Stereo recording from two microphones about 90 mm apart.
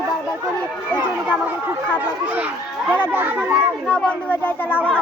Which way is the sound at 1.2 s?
20° right (ahead or behind).